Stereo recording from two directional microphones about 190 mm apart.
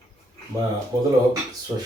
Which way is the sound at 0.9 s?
15° right (ahead or behind).